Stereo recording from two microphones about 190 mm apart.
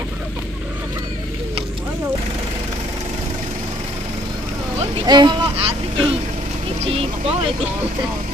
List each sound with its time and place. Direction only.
5.0 s speech: 25° right (ahead or behind)
6.8 s vehicle: 30° right (ahead or behind)